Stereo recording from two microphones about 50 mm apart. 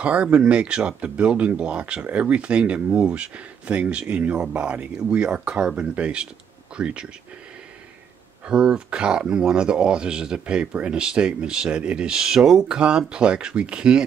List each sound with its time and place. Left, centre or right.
0.0 s speech: right
8.5 s speech: centre
12.6 s speech: centre